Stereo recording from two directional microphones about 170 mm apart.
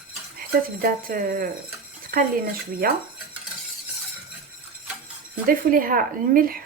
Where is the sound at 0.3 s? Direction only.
60° right (ahead or behind).